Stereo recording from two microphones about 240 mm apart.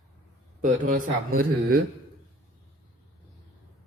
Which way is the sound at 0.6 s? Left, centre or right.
Right.